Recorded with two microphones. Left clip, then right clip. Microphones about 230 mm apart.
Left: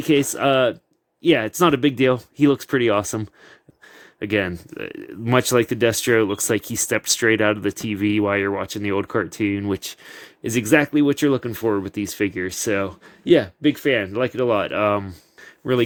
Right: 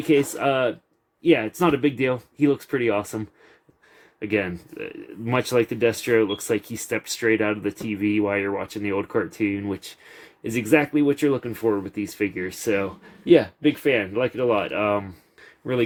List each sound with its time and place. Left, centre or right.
0.0 s speech: left